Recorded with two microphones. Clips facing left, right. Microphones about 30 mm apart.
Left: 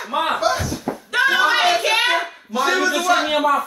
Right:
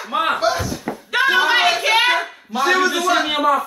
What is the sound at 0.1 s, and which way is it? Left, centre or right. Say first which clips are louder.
Slam: right 1 dB; centre.